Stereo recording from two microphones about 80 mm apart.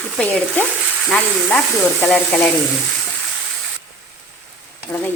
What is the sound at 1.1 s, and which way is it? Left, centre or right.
Speech, centre.